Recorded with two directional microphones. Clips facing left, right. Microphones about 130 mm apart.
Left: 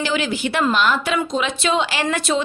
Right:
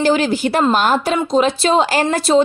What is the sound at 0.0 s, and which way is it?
A woman's voice, 40° right (ahead or behind).